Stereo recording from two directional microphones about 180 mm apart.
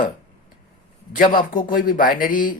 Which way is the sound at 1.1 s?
50° left (ahead or behind).